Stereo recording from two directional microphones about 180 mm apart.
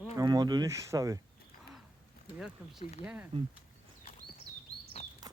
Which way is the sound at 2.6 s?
5° right (ahead or behind).